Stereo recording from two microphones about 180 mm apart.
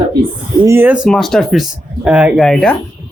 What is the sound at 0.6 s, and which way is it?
Speech, 10° right (ahead or behind).